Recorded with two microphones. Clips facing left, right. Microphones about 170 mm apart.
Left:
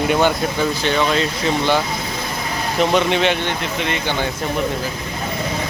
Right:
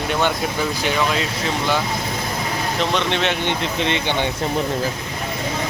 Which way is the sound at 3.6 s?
30° right (ahead or behind).